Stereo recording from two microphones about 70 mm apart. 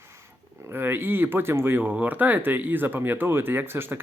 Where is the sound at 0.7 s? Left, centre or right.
Right.